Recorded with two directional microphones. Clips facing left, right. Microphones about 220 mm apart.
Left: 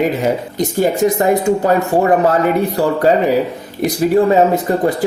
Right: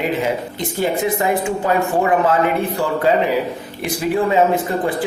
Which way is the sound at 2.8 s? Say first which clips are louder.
Left 3 dB; 40° left (ahead or behind).